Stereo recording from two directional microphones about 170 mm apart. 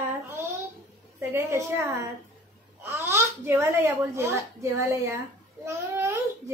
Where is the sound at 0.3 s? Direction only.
15° right (ahead or behind).